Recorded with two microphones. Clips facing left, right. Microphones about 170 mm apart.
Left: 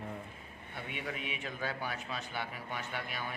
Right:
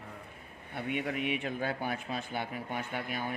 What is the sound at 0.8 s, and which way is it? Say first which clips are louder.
Speech: right 7 dB; 50° right (ahead or behind).